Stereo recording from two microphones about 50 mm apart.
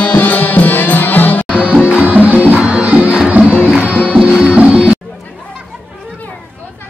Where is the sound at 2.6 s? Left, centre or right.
Right.